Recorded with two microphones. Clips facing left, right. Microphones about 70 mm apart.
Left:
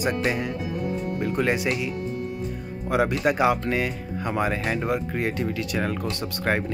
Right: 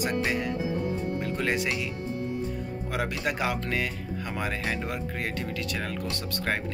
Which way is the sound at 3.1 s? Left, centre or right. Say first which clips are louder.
Left 8 dB; left.